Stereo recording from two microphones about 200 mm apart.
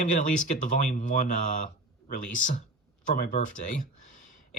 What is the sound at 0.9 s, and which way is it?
A man's voice, 40° left (ahead or behind).